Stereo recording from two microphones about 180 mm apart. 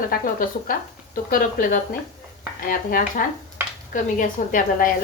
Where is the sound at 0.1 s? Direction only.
50° left (ahead or behind).